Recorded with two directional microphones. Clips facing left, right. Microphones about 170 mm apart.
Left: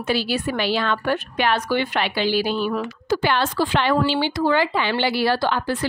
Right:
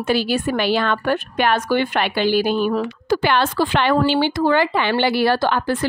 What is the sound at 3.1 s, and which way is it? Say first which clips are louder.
A woman's voice: right 2 dB; 60° right (ahead or behind).